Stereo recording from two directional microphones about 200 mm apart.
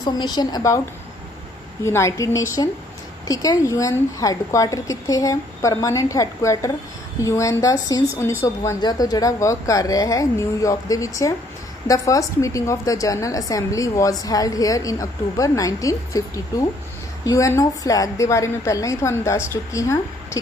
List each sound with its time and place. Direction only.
0.0 s a woman's voice: 20° left (ahead or behind)
1.8 s a woman's voice: 15° left (ahead or behind)